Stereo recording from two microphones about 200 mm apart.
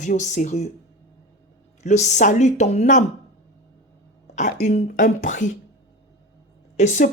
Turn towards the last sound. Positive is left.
turn(degrees=35)  # may be behind; listen again after turning